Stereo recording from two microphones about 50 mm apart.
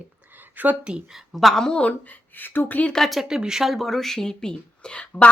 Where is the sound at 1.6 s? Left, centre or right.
Left.